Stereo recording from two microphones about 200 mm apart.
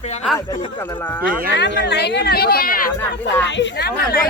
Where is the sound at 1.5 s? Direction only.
60° left (ahead or behind).